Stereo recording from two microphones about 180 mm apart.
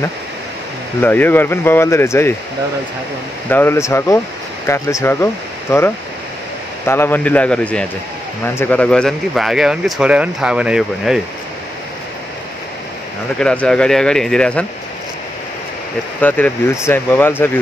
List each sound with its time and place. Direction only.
1.0 s speech: 10° left (ahead or behind)
3.4 s speech: 10° left (ahead or behind)
6.9 s speech: 10° left (ahead or behind); by 11.1 s 5° right (ahead or behind)
13.4 s speech: 5° left (ahead or behind)
16.2 s speech: 10° left (ahead or behind)